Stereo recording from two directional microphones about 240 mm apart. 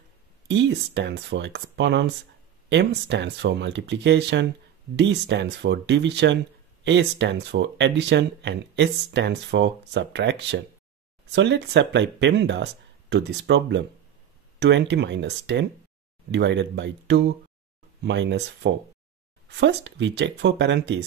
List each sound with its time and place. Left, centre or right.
0.5 s speech: right